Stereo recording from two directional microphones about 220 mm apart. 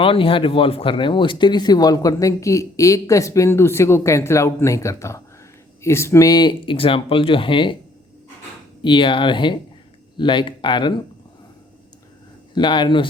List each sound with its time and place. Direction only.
0.0 s speech: 25° left (ahead or behind)
8.8 s speech: 20° left (ahead or behind)
12.5 s speech: 20° left (ahead or behind)